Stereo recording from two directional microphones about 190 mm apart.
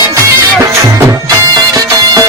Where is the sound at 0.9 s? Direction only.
20° right (ahead or behind).